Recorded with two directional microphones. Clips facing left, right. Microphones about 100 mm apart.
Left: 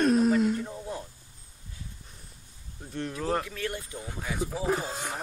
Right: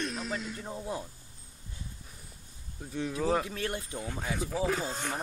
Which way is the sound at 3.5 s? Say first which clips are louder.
Even; 25° right (ahead or behind).